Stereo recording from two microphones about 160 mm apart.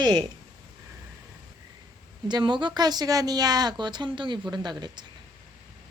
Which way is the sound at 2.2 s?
30° right (ahead or behind).